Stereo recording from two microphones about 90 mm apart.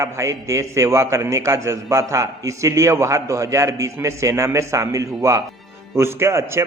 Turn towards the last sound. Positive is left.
turn(degrees=-30)  # may be behind; listen again after turning